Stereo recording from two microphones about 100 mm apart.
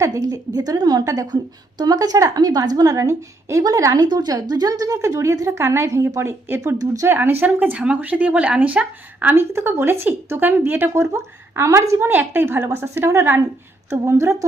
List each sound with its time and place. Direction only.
0.0 s a woman's voice: 35° right (ahead or behind)
7.2 s speech: 20° right (ahead or behind)